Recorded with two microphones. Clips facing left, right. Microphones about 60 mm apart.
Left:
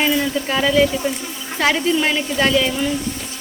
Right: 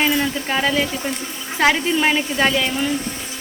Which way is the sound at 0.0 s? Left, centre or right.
Centre.